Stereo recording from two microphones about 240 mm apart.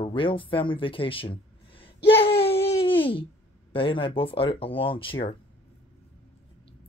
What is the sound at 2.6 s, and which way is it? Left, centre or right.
Babbling, left.